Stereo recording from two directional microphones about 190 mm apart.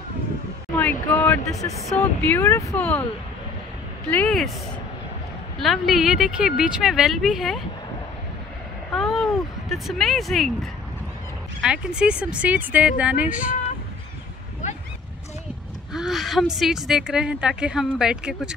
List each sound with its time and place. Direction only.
0.7 s speech: 10° left (ahead or behind)
4.1 s a woman's voice: 5° left (ahead or behind)
5.6 s a woman's voice: centre (ahead or behind)
8.9 s a sound: centre (ahead or behind)
11.6 s speech: 5° right (ahead or behind)
15.9 s a woman's voice: centre (ahead or behind)